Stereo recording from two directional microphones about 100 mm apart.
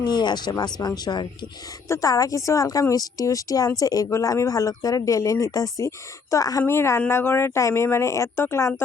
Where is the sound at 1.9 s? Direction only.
35° left (ahead or behind).